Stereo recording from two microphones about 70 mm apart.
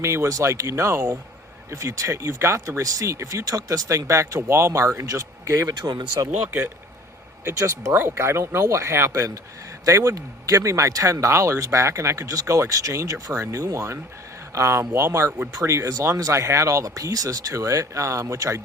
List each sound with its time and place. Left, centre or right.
0.0 s speech: right
5.6 s speech: right
7.9 s speech: right